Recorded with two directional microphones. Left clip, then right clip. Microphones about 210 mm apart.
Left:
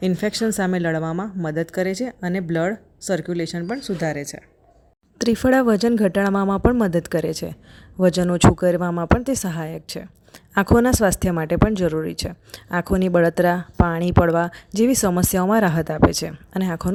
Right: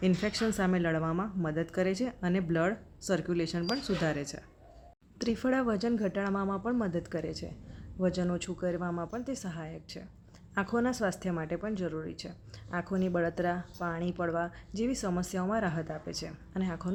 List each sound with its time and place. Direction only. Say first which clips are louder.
0.0 s speech: left 9 dB; 35° left (ahead or behind)
5.1 s speech: left 13 dB; 45° left (ahead or behind)